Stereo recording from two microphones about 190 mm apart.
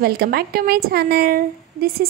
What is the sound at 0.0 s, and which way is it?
A woman's voice, 55° right (ahead or behind).